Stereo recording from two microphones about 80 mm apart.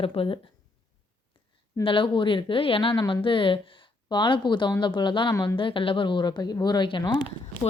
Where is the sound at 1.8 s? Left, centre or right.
Left.